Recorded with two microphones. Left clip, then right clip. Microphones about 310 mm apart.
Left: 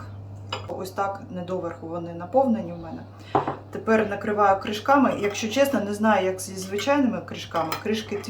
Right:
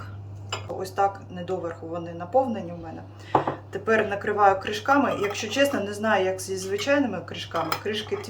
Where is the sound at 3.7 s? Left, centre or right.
Centre.